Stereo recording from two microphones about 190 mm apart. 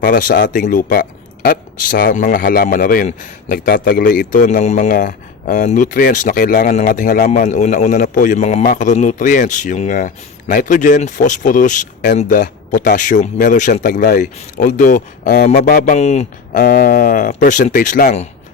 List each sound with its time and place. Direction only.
0.1 s a man's voice: 45° left (ahead or behind)
16.6 s speech: 50° left (ahead or behind)